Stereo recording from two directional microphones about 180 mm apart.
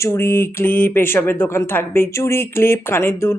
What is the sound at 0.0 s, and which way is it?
Speech, 15° left (ahead or behind).